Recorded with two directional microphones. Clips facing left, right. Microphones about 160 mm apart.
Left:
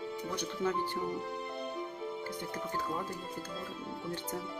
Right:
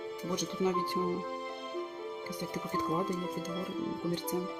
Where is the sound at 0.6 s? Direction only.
15° right (ahead or behind).